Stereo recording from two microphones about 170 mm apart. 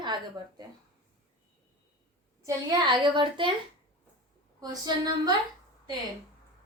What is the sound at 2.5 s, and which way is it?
A woman's voice, 25° right (ahead or behind).